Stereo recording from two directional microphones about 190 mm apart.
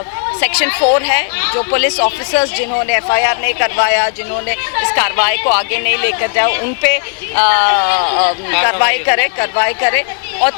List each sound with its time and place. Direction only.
0.3 s speech: 15° left (ahead or behind)